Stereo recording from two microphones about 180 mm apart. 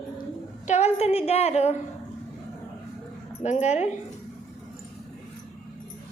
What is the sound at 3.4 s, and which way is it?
Speech, 40° left (ahead or behind).